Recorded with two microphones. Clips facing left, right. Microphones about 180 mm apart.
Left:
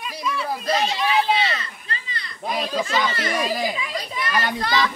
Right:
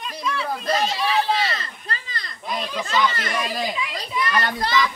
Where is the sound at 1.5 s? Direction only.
40° right (ahead or behind).